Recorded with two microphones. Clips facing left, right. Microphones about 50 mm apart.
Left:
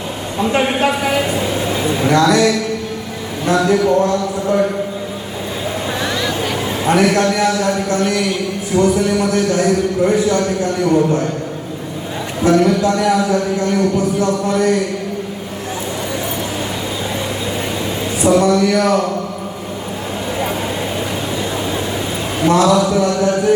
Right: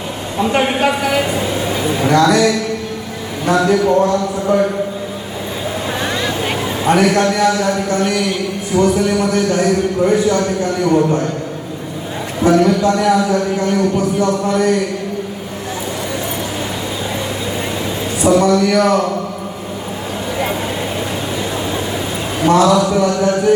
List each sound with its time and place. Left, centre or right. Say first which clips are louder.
0.3 s a woman's voice: right 1 dB; centre
3.4 s speech: right 1 dB; centre
6.1 s vehicle: even; right
6.8 s speech: right 1 dB; centre
7.4 s speech: right 1 dB; centre
10.1 s speech: right 2 dB; centre
10.6 s speech: even; centre
12.4 s speech: right 1 dB; centre
13.9 s speech: right 1 dB; right
14.5 s speech: even; centre
18.2 s speech: right 1 dB; centre
22.4 s speech: right 1 dB; centre